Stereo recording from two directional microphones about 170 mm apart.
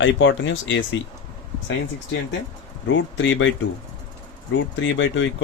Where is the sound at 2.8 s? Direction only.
90° left.